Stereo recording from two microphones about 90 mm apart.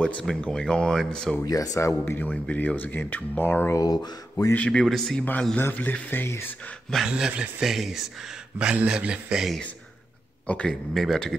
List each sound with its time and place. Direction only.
0.0 s speech: 10° left (ahead or behind)
1.4 s speech: 45° left (ahead or behind)
2.1 s speech: 15° left (ahead or behind)
3.7 s speech: 45° left (ahead or behind)
4.6 s speech: 15° left (ahead or behind)
5.6 s speech: 20° left (ahead or behind)
7.1 s a man's voice: 10° right (ahead or behind)
8.5 s a man's voice: 10° right (ahead or behind)
10.4 s speech: 15° left (ahead or behind)
10.9 s speech: centre (ahead or behind)